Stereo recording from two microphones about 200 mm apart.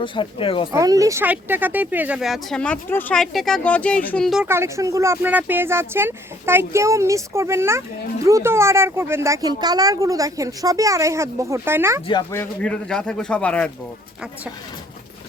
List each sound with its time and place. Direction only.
0.0 s speech: 25° left (ahead or behind)
0.7 s speech: 15° right (ahead or behind); by 4.4 s centre (ahead or behind)
4.4 s speech: 15° right (ahead or behind)
12.3 s speech: 10° left (ahead or behind)